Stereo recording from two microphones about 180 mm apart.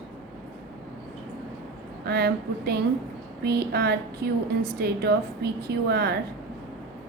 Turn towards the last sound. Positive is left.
turn(degrees=-65)  # may be behind; listen again after turning